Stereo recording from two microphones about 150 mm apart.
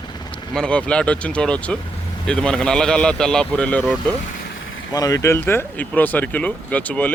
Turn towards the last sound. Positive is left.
turn(degrees=10)  # may be behind; listen again after turning